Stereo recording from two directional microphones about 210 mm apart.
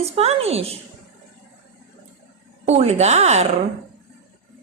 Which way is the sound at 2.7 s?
30° right (ahead or behind).